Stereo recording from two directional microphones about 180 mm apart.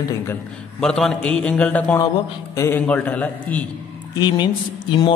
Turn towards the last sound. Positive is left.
turn(degrees=25)  # may be behind; listen again after turning